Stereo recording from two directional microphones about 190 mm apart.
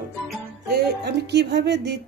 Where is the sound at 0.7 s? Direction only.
60° right (ahead or behind).